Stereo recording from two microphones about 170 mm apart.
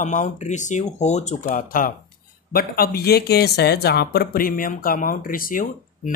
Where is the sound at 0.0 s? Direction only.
45° left (ahead or behind).